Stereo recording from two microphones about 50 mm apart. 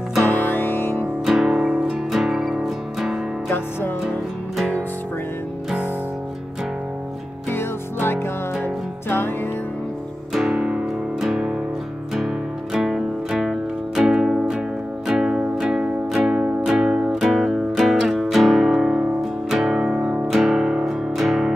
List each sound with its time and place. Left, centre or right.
0.3 s music: left
1.2 s music: centre
3.4 s music: left
7.4 s music: left
10.3 s music: centre